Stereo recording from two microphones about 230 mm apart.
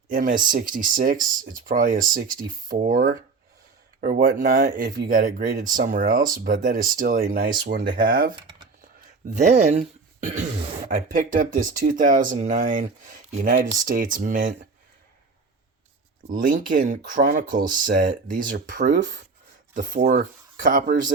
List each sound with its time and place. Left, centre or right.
0.1 s speech: right
16.3 s speech: right